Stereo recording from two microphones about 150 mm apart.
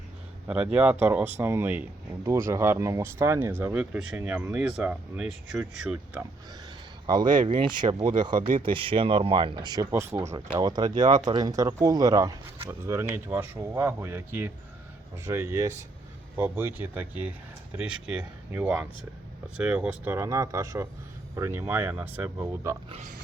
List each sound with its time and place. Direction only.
0.4 s speech: 10° right (ahead or behind)
7.1 s speech: 30° right (ahead or behind)
8.4 s speech: 65° right (ahead or behind)
8.6 s speech: 35° right (ahead or behind)
9.9 s speech: 15° right (ahead or behind)
10.6 s speech: 25° right (ahead or behind)
11.0 s speech: 55° right (ahead or behind)
11.3 s speech: 25° right (ahead or behind); by 20.1 s 5° right (ahead or behind)
20.1 s speech: 20° right (ahead or behind)